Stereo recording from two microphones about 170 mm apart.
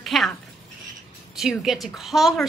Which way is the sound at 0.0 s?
Centre (ahead or behind).